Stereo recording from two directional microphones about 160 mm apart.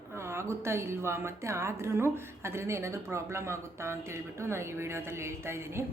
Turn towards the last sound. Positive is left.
turn(degrees=-15)  # may be behind; listen again after turning